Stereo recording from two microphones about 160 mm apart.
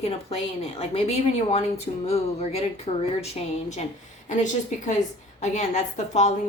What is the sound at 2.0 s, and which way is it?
A woman's voice, 40° left (ahead or behind).